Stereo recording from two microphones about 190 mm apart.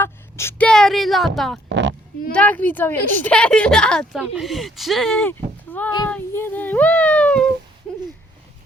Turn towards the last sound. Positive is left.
turn(degrees=5)  # may be behind; listen again after turning